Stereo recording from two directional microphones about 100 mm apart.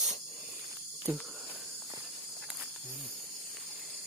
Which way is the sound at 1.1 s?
15° right (ahead or behind).